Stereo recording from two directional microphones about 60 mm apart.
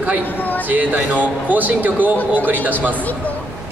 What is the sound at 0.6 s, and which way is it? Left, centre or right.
A man's voice, right.